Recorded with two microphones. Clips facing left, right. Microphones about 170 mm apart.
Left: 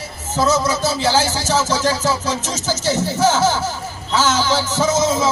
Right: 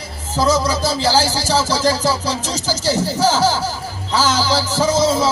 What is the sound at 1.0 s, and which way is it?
Music, 35° right (ahead or behind).